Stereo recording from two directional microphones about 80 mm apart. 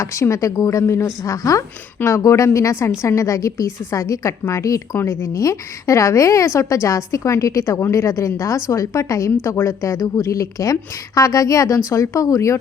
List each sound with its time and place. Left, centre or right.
0.0 s a woman's voice: left